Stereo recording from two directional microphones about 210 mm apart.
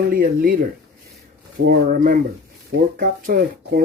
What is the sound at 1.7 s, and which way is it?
Speech, 40° right (ahead or behind).